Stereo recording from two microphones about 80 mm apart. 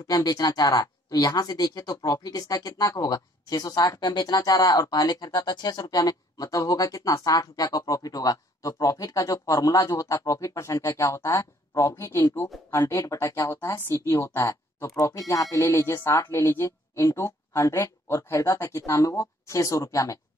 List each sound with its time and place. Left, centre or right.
0.0 s speech: left